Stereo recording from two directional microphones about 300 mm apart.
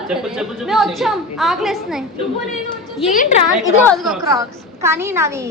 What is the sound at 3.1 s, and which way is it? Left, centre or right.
Speech, left.